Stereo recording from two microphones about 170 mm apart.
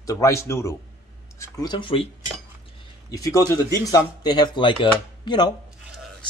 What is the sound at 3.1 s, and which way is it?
Speech, 20° left (ahead or behind).